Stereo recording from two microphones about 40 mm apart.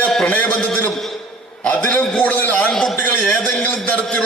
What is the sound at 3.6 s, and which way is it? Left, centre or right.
Speech, left.